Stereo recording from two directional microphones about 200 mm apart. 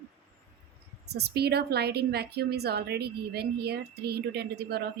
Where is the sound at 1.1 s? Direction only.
55° right (ahead or behind).